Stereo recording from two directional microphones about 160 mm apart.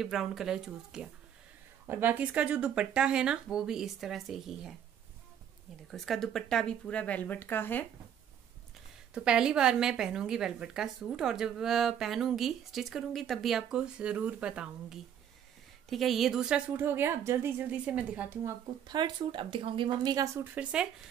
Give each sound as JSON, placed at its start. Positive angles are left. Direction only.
{"t": 0.0, "sound": "a woman's voice", "side_deg": 0}
{"t": 5.9, "sound": "speech", "side_deg": 0}
{"t": 9.1, "sound": "a woman's voice", "side_deg": -5}
{"t": 18.9, "sound": "speech", "side_deg": -25}
{"t": 20.3, "sound": "a woman's voice", "side_deg": -5}